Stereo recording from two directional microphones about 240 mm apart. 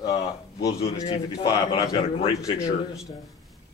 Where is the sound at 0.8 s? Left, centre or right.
Left.